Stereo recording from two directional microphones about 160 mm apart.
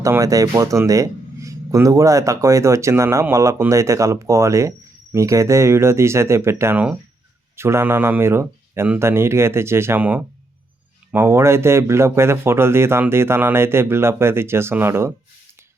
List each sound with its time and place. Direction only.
0.0 s speech: 20° right (ahead or behind)